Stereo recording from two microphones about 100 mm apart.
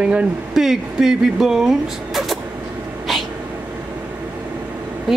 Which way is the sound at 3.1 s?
Centre (ahead or behind).